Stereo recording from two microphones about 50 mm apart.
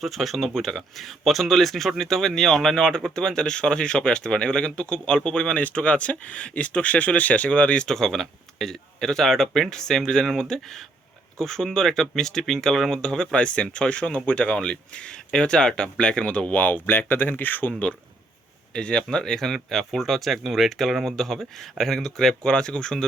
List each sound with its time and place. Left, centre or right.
0.0 s speech: centre; by 7.9 s left
7.9 s speech: centre
19.5 s speech: centre